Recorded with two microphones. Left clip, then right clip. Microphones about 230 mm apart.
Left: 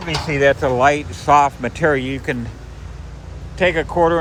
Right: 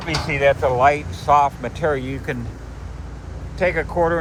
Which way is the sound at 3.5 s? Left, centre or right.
Left.